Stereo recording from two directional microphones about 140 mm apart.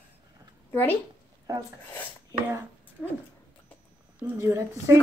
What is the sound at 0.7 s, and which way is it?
Speech, 15° left (ahead or behind).